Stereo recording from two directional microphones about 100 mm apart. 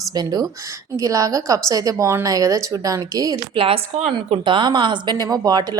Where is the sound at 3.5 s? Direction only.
65° right (ahead or behind).